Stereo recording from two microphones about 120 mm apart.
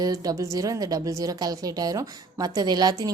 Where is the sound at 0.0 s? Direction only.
30° right (ahead or behind).